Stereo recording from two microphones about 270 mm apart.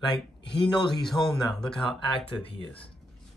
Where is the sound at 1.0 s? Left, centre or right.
Centre.